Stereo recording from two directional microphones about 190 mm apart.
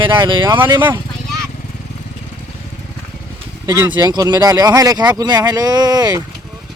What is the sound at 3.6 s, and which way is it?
Speech, 15° right (ahead or behind).